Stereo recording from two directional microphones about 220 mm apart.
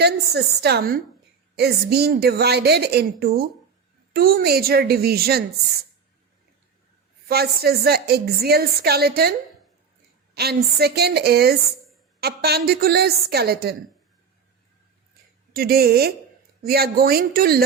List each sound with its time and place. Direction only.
0.0 s a woman's voice: 50° right (ahead or behind)
7.3 s a woman's voice: 45° right (ahead or behind)
10.3 s a woman's voice: 45° right (ahead or behind)
15.5 s a woman's voice: 45° right (ahead or behind)